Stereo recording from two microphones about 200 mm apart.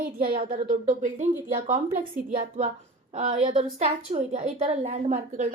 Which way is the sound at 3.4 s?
30° right (ahead or behind).